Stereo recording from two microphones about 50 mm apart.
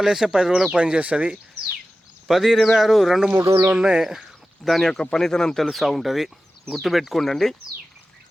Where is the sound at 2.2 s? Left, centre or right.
Centre.